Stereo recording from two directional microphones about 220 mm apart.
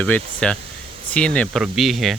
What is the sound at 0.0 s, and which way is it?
Speech, 5° left (ahead or behind).